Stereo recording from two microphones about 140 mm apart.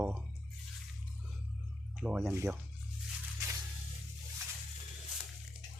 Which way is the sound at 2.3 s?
20° right (ahead or behind).